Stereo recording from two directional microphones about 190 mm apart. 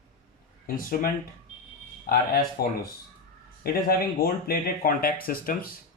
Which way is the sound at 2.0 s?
50° left (ahead or behind).